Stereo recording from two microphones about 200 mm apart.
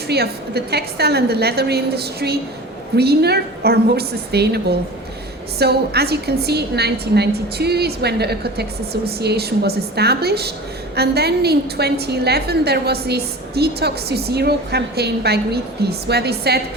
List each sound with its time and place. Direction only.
0.1 s a woman's voice: 55° right (ahead or behind)